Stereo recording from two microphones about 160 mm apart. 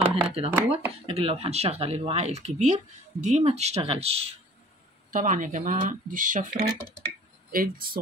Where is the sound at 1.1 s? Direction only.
40° right (ahead or behind).